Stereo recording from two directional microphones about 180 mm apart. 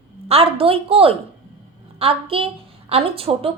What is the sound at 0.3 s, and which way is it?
A woman's voice, 30° right (ahead or behind).